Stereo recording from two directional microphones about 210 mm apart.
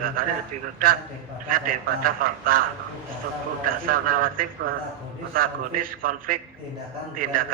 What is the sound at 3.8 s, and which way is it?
A man's voice, 45° right (ahead or behind).